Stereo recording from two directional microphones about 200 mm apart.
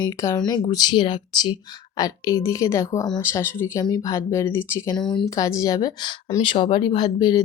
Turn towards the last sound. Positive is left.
turn(degrees=20)  # may be behind; listen again after turning